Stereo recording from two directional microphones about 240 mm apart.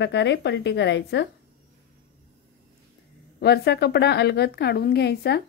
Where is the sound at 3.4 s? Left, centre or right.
Left.